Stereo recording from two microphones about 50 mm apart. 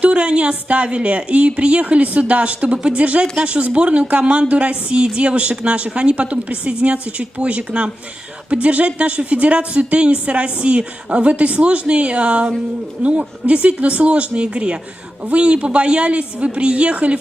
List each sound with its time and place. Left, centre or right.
0.0 s speech: right